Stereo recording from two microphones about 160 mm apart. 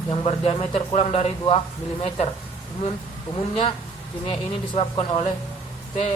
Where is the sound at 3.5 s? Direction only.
35° left (ahead or behind).